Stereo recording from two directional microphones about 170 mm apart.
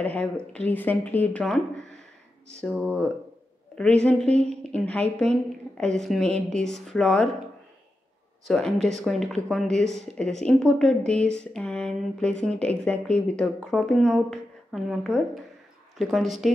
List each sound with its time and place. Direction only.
0.0 s a woman's voice: 10° left (ahead or behind)
8.5 s speech: centre (ahead or behind)